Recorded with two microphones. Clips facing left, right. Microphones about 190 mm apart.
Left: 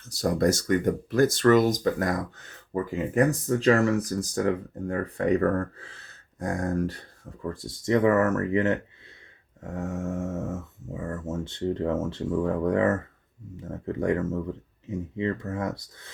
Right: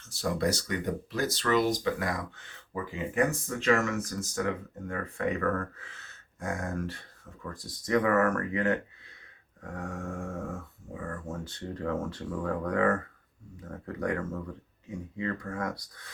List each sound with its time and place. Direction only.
0.1 s speech: 40° left (ahead or behind); by 16.1 s 25° left (ahead or behind)